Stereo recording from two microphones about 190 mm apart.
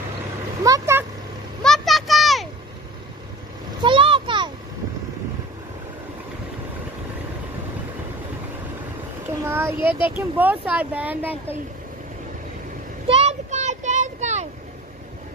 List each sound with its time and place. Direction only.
0.7 s speech: 15° right (ahead or behind)
1.6 s vehicle: centre (ahead or behind)
3.8 s a sound: 25° right (ahead or behind)
9.4 s a sound: 15° right (ahead or behind)
10.0 s speech: 10° right (ahead or behind)
13.0 s vehicle: 30° right (ahead or behind)